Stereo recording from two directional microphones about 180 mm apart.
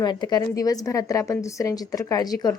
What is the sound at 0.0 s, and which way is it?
A woman's voice, 25° left (ahead or behind).